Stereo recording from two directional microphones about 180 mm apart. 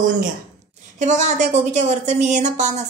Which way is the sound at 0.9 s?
40° right (ahead or behind).